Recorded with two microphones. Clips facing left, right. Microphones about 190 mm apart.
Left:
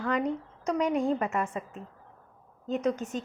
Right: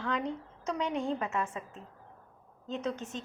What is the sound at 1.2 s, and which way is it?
Speech, 55° left (ahead or behind).